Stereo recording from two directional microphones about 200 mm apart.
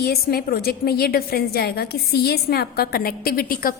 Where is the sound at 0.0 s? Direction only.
50° left (ahead or behind).